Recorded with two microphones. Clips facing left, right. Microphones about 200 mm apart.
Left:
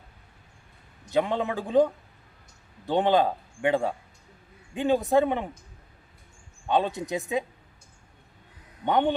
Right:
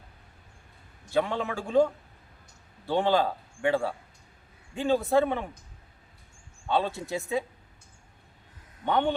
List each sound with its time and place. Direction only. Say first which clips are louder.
1.1 s a man's voice: left 2 dB; 20° left (ahead or behind)
6.7 s a man's voice: left 2 dB; 20° left (ahead or behind)
8.8 s a man's voice: left 2 dB; 20° left (ahead or behind)